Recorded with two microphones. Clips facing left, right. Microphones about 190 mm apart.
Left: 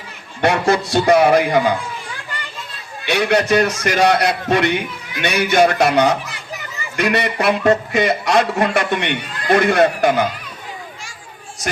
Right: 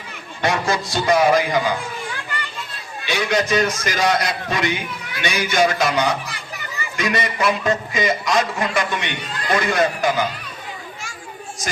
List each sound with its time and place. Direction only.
0.4 s a man's voice: 65° left (ahead or behind)
3.1 s a man's voice: 65° left (ahead or behind)